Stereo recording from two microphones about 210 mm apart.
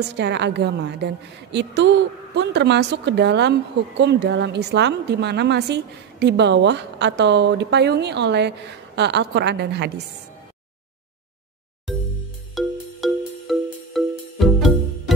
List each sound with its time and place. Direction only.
0.1 s a woman's voice: 55° right (ahead or behind)
12.5 s music: centre (ahead or behind)